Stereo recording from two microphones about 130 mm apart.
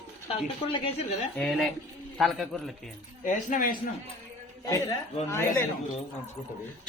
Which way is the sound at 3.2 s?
85° left.